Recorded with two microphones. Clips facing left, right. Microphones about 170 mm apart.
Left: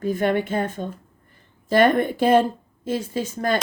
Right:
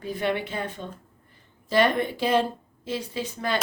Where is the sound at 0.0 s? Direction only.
45° left (ahead or behind).